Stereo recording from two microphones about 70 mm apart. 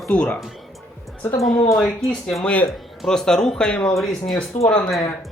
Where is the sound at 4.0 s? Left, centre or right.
Centre.